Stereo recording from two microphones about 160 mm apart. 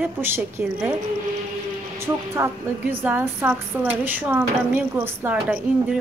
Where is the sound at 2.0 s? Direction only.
15° right (ahead or behind).